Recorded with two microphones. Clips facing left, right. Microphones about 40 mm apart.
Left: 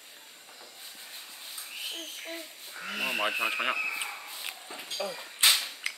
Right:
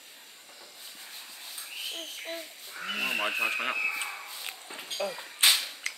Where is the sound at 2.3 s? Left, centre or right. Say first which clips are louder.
Right 1 dB; centre.